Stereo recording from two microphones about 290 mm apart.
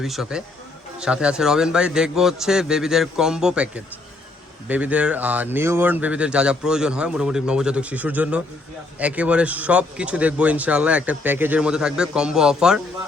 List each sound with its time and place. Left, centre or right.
0.0 s a man's voice: centre